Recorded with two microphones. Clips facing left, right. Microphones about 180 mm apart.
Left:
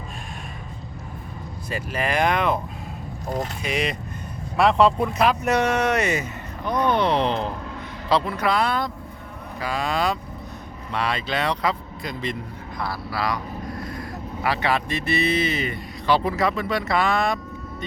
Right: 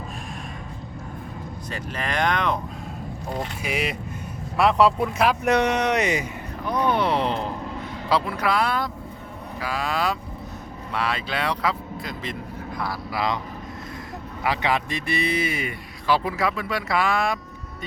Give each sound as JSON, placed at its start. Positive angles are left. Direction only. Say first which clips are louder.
{"t": 1.7, "sound": "speech", "louder": "left 4 dB", "side_deg": 10}
{"t": 3.6, "sound": "speech", "louder": "left 1 dB", "side_deg": -5}
{"t": 6.7, "sound": "a sound", "louder": "left 1 dB", "side_deg": -10}
{"t": 8.1, "sound": "speech", "louder": "left 1 dB", "side_deg": -5}
{"t": 12.8, "sound": "speech", "louder": "even", "side_deg": -15}
{"t": 14.4, "sound": "speech", "louder": "left 1 dB", "side_deg": -15}